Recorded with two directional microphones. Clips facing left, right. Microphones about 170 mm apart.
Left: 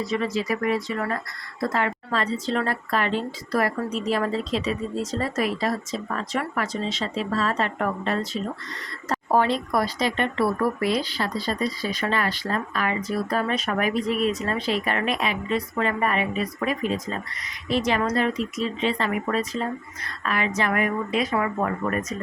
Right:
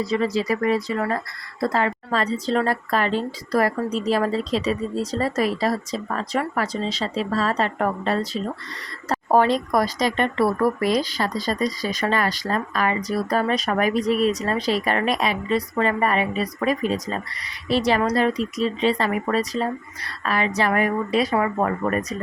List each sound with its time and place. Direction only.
0.0 s speech: 35° right (ahead or behind)